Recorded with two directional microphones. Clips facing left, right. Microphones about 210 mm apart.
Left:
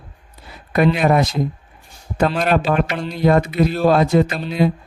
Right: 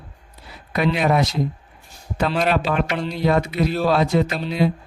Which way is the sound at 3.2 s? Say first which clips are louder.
Left 5 dB; 50° left (ahead or behind).